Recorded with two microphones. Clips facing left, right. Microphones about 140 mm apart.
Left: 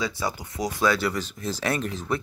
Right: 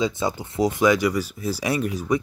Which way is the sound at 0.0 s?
20° right (ahead or behind).